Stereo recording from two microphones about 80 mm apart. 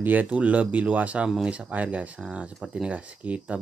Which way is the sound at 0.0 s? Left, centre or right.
Right.